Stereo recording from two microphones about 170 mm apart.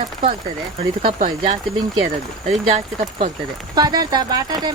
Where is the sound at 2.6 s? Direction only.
40° right (ahead or behind).